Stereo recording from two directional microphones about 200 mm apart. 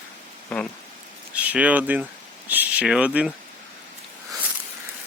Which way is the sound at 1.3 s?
5° right (ahead or behind).